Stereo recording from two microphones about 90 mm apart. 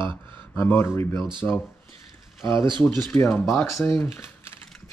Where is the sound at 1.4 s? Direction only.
15° left (ahead or behind).